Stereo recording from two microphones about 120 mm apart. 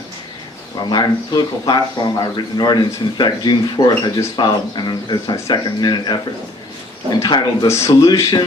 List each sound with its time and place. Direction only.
0.9 s speech: 35° left (ahead or behind)
7.7 s speech: 25° left (ahead or behind)